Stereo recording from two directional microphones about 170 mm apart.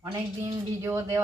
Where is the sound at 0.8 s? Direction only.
15° right (ahead or behind).